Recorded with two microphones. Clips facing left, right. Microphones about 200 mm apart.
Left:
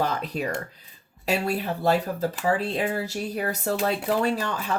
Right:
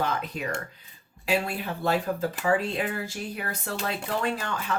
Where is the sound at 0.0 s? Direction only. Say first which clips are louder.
Left 3 dB; 35° left (ahead or behind).